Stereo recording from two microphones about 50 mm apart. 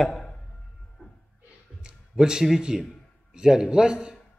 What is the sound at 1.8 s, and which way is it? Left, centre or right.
A man's voice, centre.